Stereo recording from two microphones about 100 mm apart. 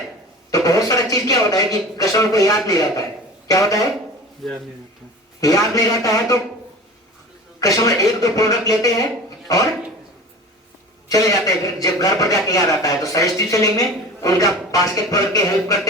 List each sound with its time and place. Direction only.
0.5 s a sound: 35° left (ahead or behind)
1.1 s a man's voice: 35° left (ahead or behind)
4.4 s speech: centre (ahead or behind)
5.4 s a man's voice: 35° left (ahead or behind)
7.6 s a man's voice: 35° left (ahead or behind)
11.1 s a man's voice: 35° left (ahead or behind)